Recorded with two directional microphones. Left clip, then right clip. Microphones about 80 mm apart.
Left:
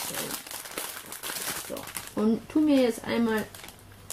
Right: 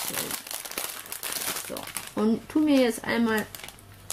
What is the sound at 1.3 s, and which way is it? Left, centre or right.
Crumpling, centre.